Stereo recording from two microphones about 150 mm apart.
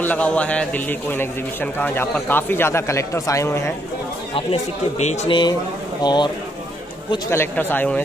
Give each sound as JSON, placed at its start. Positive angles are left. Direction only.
{"t": 0.0, "sound": "a man's voice", "side_deg": 10}
{"t": 4.3, "sound": "speech", "side_deg": 40}
{"t": 5.3, "sound": "a man's voice", "side_deg": 30}
{"t": 7.2, "sound": "a man's voice", "side_deg": 15}